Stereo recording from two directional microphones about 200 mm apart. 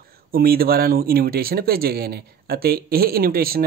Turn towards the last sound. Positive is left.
turn(degrees=-50)  # may be behind; listen again after turning